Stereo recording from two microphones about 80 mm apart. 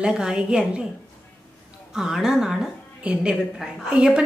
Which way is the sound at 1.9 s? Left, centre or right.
Centre.